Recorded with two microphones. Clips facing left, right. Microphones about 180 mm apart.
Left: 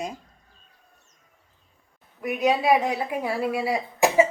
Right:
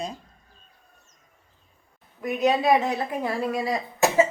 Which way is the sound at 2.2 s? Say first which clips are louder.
Even; 10° left (ahead or behind).